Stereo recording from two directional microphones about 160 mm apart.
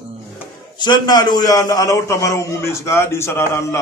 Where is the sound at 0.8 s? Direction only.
25° left (ahead or behind).